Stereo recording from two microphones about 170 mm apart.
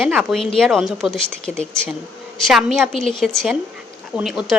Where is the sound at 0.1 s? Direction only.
Centre (ahead or behind).